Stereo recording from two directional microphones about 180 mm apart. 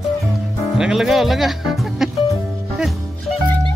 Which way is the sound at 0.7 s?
5° right (ahead or behind).